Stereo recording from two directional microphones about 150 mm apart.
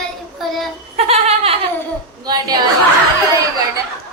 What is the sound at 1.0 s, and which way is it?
Goat, 45° right (ahead or behind).